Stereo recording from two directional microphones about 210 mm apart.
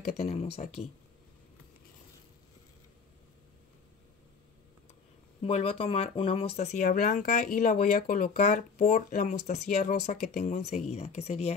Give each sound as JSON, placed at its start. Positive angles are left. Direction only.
{"t": 0.2, "sound": "speech", "side_deg": 30}
{"t": 5.4, "sound": "speech", "side_deg": 30}